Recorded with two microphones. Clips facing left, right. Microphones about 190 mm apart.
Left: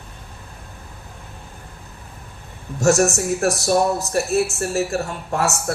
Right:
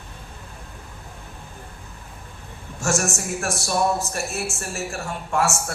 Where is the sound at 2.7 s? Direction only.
35° left (ahead or behind).